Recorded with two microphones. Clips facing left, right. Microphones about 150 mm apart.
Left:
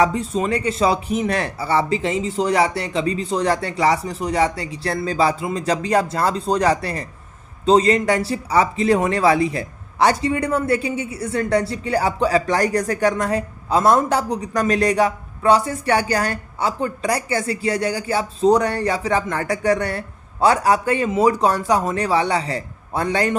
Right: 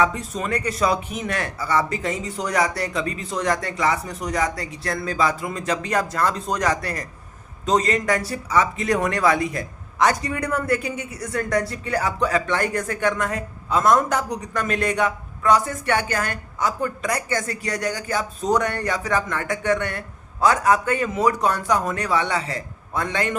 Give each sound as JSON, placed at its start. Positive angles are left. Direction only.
{"t": 0.0, "sound": "speech", "side_deg": 30}